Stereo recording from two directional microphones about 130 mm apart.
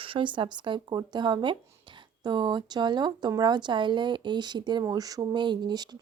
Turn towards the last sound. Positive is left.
turn(degrees=-35)  # may be behind; listen again after turning